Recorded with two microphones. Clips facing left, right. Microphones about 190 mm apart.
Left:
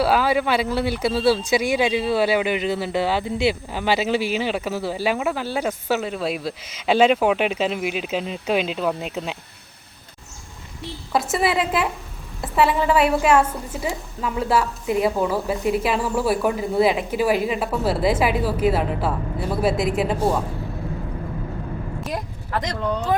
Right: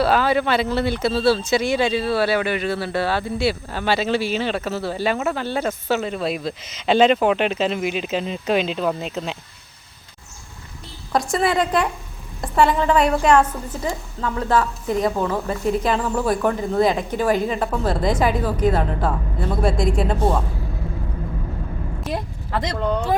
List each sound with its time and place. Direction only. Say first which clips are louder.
0.0 s speech: right 1 dB; 10° left (ahead or behind)
11.1 s a woman's voice: right 1 dB; 5° left (ahead or behind)
22.1 s a sound: right 2 dB; 30° right (ahead or behind)